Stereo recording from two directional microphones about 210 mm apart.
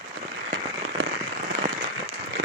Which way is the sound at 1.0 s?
65° right (ahead or behind).